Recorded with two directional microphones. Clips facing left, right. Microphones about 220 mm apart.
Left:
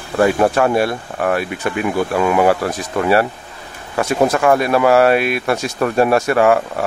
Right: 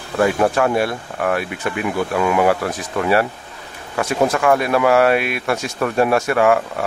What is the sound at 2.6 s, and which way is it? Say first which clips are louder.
Speech: left 2 dB; 35° left (ahead or behind).